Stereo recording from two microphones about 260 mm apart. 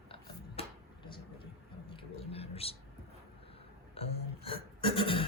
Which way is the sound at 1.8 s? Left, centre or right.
Left.